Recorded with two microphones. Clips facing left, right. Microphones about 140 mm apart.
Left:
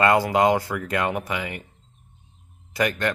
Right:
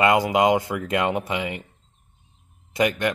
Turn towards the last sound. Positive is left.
turn(degrees=-15)  # may be behind; listen again after turning